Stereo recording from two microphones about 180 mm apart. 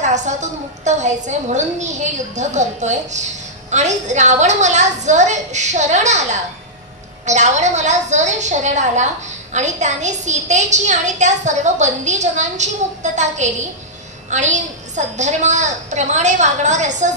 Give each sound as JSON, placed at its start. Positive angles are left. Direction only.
{"t": 0.0, "sound": "a woman's voice", "side_deg": -40}
{"t": 7.2, "sound": "a woman's voice", "side_deg": -40}